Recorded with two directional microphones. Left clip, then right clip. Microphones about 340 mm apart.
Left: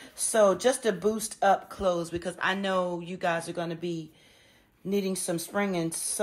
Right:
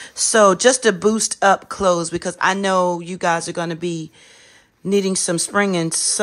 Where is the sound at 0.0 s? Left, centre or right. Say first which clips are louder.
Right 9 dB; right.